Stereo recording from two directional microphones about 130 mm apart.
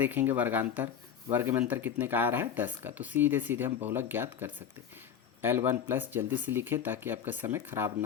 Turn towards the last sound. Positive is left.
turn(degrees=-20)  # may be behind; listen again after turning